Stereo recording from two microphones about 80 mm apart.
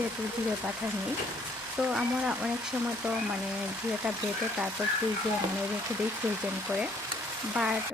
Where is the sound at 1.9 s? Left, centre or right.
Centre.